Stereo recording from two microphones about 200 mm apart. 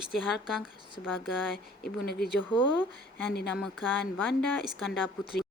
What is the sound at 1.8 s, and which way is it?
Speech, 50° left (ahead or behind).